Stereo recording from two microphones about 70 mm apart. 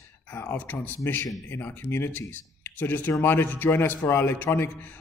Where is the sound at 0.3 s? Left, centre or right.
Left.